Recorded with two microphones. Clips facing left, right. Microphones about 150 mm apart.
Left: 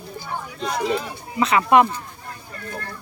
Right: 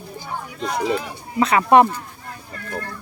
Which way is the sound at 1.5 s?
35° right (ahead or behind).